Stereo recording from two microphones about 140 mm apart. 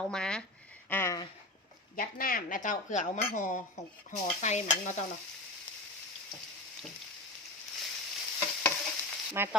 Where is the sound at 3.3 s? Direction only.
65° left (ahead or behind).